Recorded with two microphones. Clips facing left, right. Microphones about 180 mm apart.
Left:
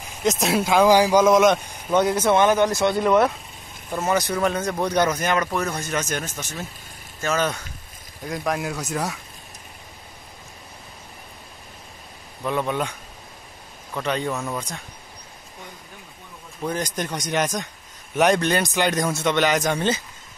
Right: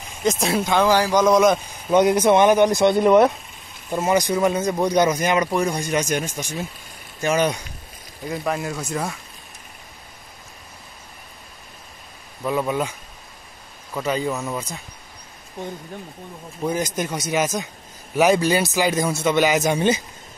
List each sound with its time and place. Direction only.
0.2 s speech: centre (ahead or behind)
1.9 s speech: 15° right (ahead or behind)
8.3 s speech: centre (ahead or behind)
12.4 s speech: 5° right (ahead or behind)
13.9 s speech: 5° right (ahead or behind)
16.6 s speech: 10° right (ahead or behind)